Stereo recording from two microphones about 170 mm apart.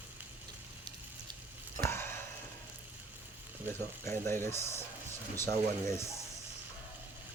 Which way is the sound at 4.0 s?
15° left (ahead or behind).